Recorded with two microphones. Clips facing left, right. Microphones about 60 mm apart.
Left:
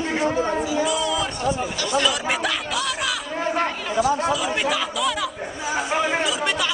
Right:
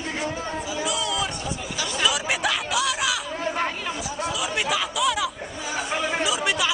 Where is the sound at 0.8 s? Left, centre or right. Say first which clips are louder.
Left 4 dB; centre.